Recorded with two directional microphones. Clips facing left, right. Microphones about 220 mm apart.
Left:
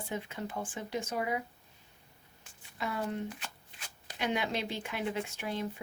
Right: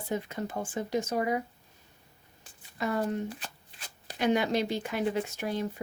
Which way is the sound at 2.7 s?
45° right (ahead or behind).